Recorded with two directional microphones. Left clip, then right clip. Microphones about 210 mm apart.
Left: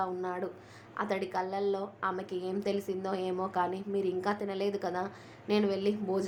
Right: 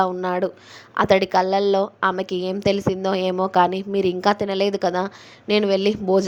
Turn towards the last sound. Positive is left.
turn(degrees=-35)  # may be behind; listen again after turning